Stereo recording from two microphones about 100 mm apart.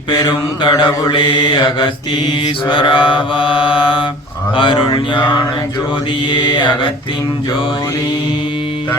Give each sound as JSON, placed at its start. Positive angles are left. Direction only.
{"t": 0.3, "sound": "mantra", "side_deg": 55}